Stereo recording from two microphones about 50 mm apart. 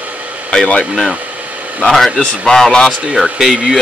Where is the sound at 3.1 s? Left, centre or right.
Centre.